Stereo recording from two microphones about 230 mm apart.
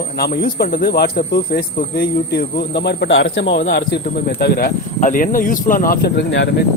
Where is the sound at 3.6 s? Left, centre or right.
Left.